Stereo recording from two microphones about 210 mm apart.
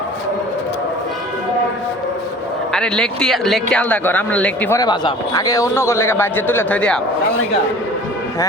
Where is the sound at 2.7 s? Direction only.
5° left (ahead or behind).